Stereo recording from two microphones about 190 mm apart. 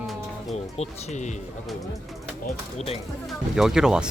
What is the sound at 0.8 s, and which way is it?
Speech, 40° left (ahead or behind).